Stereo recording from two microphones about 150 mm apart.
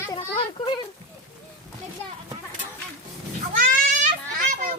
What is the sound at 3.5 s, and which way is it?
Children playing, 60° right (ahead or behind).